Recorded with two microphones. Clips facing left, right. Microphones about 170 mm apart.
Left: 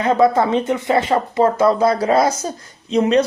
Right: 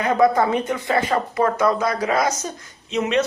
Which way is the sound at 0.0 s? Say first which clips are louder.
Left 2 dB; 25° left (ahead or behind).